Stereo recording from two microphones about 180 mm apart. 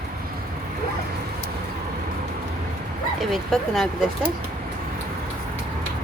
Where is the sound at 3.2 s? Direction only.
Centre (ahead or behind).